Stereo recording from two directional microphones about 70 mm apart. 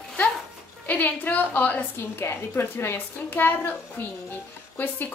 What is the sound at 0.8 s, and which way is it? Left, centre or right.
A woman's voice, left.